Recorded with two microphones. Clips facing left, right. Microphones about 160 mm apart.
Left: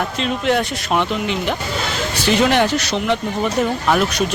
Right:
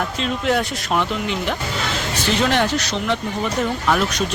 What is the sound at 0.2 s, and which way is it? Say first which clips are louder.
Speech: left 2 dB; centre (ahead or behind).